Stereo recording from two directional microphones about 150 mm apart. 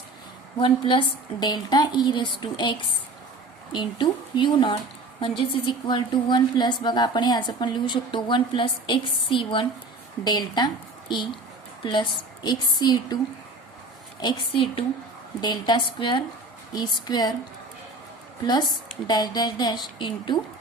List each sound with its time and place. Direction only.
0.6 s a woman's voice: 35° left (ahead or behind)
11.8 s a woman's voice: 30° left (ahead or behind)
14.2 s a woman's voice: 30° left (ahead or behind)
19.0 s a woman's voice: 25° left (ahead or behind)